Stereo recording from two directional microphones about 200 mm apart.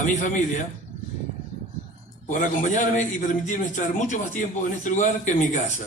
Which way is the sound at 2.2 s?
40° left (ahead or behind).